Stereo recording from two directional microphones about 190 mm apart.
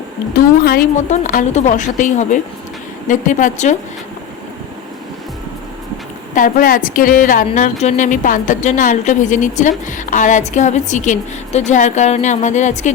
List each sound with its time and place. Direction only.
0.3 s a woman's voice: 55° left (ahead or behind)
0.9 s a woman's voice: 40° left (ahead or behind)
6.3 s a woman's voice: 50° left (ahead or behind)